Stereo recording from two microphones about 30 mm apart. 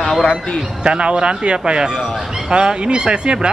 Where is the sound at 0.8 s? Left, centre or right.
Right.